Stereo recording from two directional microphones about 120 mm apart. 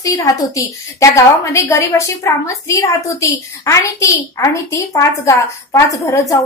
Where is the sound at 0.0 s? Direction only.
30° left (ahead or behind).